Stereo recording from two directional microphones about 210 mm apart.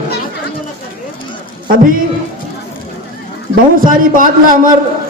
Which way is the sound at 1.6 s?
40° right (ahead or behind).